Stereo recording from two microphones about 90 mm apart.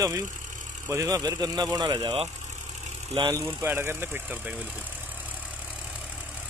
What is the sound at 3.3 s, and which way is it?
Speech, 30° right (ahead or behind).